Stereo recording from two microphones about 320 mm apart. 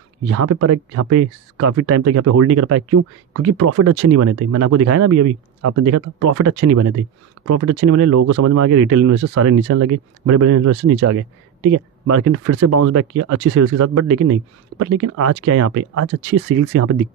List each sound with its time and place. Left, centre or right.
0.3 s speech: right